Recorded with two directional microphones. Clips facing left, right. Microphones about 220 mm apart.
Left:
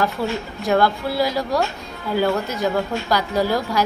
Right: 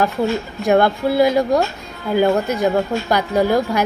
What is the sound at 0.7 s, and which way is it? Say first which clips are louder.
A woman's voice: right 4 dB; 20° right (ahead or behind).